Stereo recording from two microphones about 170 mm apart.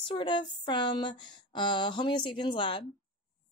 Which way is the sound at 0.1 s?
30° left (ahead or behind).